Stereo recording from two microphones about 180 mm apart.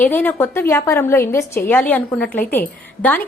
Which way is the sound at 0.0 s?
10° left (ahead or behind).